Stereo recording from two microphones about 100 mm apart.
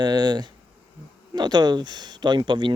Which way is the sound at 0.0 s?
45° right (ahead or behind).